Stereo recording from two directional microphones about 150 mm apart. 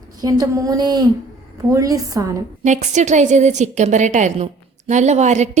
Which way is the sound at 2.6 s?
50° right (ahead or behind).